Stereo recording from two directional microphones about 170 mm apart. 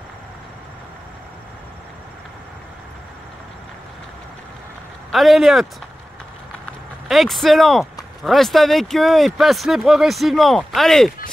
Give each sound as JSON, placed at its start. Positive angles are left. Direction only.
{"t": 5.1, "sound": "speech", "side_deg": 0}
{"t": 7.1, "sound": "speech", "side_deg": 0}